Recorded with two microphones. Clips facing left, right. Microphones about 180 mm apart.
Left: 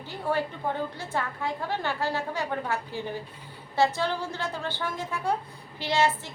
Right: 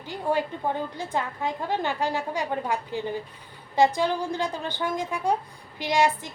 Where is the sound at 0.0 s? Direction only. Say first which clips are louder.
Right 2 dB; 15° right (ahead or behind).